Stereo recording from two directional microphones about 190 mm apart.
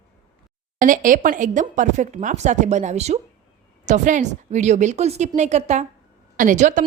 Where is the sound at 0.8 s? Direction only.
45° right (ahead or behind).